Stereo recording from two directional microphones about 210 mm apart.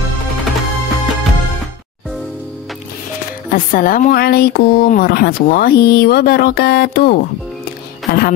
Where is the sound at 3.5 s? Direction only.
40° left (ahead or behind).